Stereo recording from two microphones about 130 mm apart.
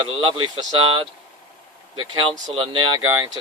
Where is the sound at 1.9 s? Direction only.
35° right (ahead or behind).